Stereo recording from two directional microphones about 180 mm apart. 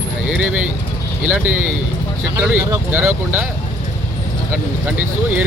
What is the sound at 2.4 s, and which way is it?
Speech, 10° right (ahead or behind).